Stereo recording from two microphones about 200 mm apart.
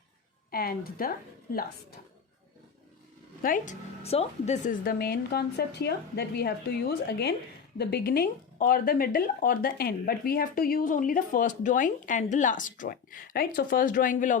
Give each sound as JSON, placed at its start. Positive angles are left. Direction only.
{"t": 0.5, "sound": "speech", "side_deg": 50}
{"t": 3.4, "sound": "speech", "side_deg": 40}
{"t": 4.8, "sound": "speech", "side_deg": 50}